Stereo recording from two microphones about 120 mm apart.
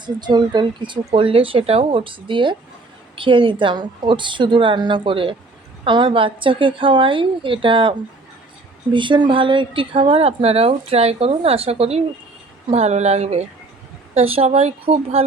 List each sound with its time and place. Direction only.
0.0 s a woman's voice: 40° right (ahead or behind); by 15.2 s 55° right (ahead or behind)